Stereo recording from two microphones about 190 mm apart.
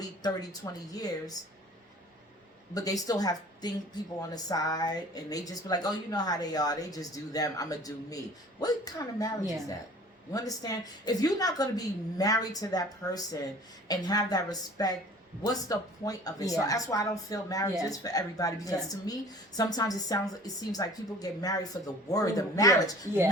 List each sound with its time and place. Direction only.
0.2 s speech: 20° left (ahead or behind)
2.7 s speech: 20° left (ahead or behind)